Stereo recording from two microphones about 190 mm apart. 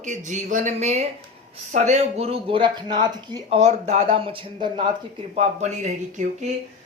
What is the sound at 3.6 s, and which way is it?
Speech, 35° right (ahead or behind).